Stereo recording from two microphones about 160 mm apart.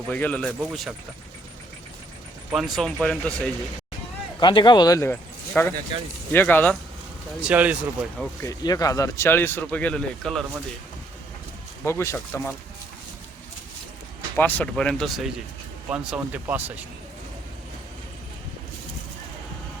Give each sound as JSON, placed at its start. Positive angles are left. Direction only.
{"t": 0.1, "sound": "speech", "side_deg": 10}
{"t": 2.5, "sound": "speech", "side_deg": 0}
{"t": 4.4, "sound": "speech", "side_deg": 30}
{"t": 7.4, "sound": "speech", "side_deg": -10}
{"t": 8.4, "sound": "speech", "side_deg": 25}
{"t": 11.9, "sound": "speech", "side_deg": 15}
{"t": 14.3, "sound": "speech", "side_deg": 10}